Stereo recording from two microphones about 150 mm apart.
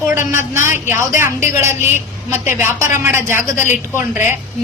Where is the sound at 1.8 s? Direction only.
50° left (ahead or behind).